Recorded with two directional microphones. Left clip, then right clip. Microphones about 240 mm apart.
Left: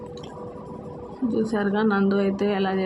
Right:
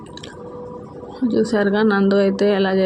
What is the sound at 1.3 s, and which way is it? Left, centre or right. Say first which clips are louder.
Speech: right 7 dB; centre.